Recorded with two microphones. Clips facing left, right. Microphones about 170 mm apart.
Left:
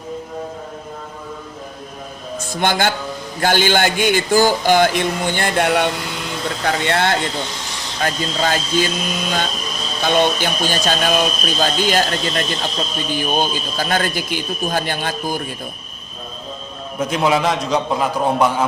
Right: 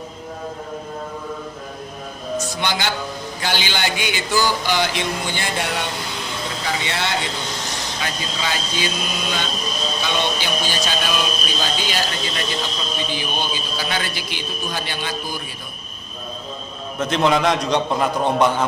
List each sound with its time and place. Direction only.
2.5 s speech: 50° left (ahead or behind)
17.0 s a man's voice: 5° left (ahead or behind)